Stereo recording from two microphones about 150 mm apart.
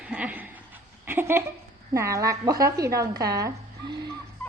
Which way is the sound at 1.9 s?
20° right (ahead or behind).